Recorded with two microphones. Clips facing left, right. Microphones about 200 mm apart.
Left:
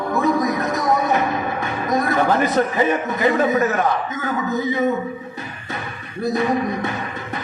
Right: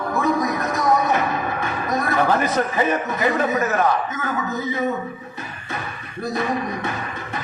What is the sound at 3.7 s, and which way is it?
Music, 40° left (ahead or behind).